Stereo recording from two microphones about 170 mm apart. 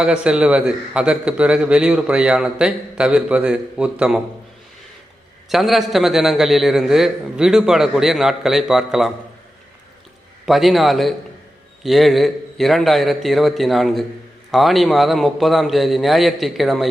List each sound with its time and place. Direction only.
0.0 s a man's voice: 5° right (ahead or behind)
5.5 s a man's voice: centre (ahead or behind)
10.4 s a man's voice: centre (ahead or behind)